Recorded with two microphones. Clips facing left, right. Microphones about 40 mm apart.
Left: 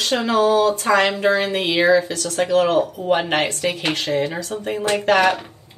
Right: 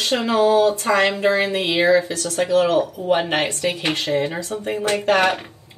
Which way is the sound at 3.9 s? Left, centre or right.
Left.